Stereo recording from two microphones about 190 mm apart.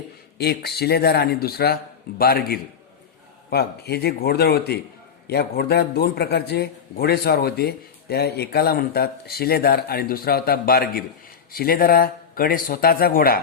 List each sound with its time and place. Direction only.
0.3 s a man's voice: 55° left (ahead or behind)